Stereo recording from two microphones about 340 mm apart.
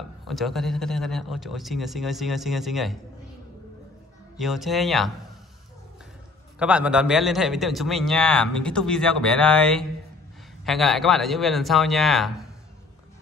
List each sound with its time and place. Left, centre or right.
0.3 s a man's voice: centre
4.4 s a man's voice: centre
6.6 s a man's voice: centre